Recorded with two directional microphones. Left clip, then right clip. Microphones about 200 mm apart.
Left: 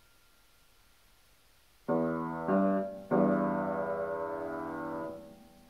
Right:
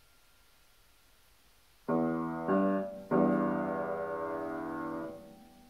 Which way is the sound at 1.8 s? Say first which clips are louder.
Left 1 dB; 25° left (ahead or behind).